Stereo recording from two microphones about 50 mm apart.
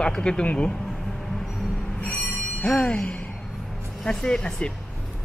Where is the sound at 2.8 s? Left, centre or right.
Centre.